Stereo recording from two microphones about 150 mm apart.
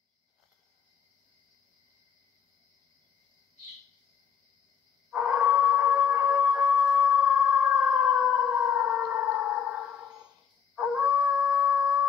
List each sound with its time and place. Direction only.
5.1 s a sound: 5° right (ahead or behind)
9.1 s sonar: 10° right (ahead or behind)
10.8 s howl: 5° right (ahead or behind)